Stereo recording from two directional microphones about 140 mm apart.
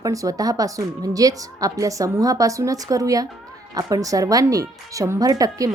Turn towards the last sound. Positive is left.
turn(degrees=-25)  # may be behind; listen again after turning